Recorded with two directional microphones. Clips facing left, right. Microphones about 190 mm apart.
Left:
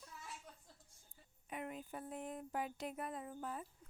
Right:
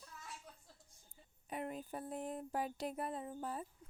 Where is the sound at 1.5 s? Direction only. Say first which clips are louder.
Right 3 dB; 35° right (ahead or behind).